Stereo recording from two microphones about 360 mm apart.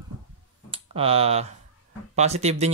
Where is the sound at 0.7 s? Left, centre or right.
Centre.